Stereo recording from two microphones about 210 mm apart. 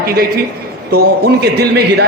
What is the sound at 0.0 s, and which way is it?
A man's voice, 45° right (ahead or behind).